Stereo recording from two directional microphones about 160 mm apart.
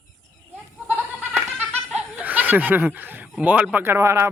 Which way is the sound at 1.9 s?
5° right (ahead or behind).